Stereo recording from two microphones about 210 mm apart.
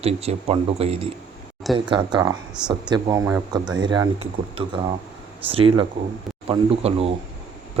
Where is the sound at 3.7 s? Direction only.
20° right (ahead or behind).